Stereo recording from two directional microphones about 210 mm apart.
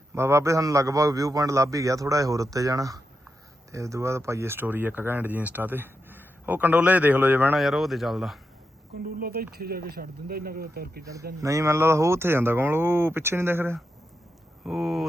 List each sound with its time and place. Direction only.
0.1 s speech: 15° right (ahead or behind)
9.0 s speech: 45° right (ahead or behind)
11.3 s speech: 15° right (ahead or behind)